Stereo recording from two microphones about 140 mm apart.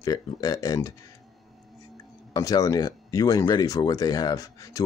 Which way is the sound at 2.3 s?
25° left (ahead or behind).